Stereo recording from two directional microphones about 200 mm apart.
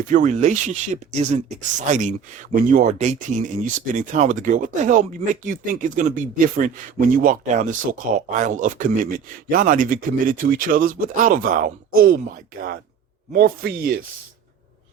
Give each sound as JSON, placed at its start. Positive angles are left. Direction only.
{"t": 0.1, "sound": "speech", "side_deg": -40}
{"t": 13.3, "sound": "speech", "side_deg": -50}